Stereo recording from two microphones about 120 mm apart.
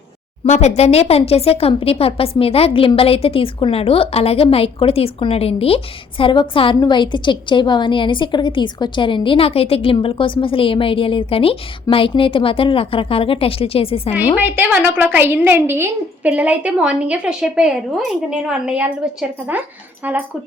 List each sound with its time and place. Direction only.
0.4 s a woman's voice: 70° left (ahead or behind); by 14.1 s 50° left (ahead or behind)
14.3 s a woman's voice: 15° right (ahead or behind)